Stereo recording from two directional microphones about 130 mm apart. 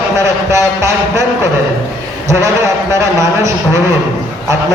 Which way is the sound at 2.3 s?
25° right (ahead or behind).